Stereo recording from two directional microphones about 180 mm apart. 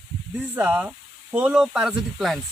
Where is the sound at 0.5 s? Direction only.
10° right (ahead or behind).